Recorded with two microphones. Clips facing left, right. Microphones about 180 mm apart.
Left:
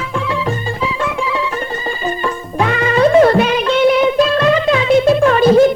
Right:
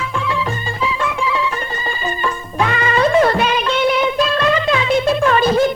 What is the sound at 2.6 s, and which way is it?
Music, 40° left (ahead or behind).